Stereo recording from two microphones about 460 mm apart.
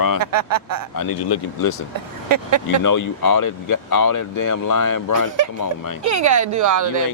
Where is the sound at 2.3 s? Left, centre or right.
Right.